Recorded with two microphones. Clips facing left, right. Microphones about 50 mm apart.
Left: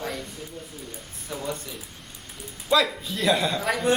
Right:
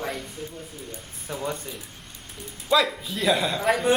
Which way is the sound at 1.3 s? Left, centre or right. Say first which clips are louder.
Right 1 dB; centre.